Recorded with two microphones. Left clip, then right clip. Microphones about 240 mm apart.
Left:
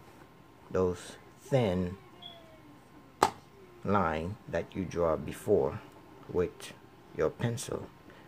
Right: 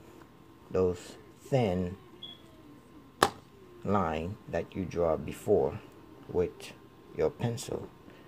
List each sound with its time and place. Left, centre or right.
0.7 s speech: centre
3.8 s speech: centre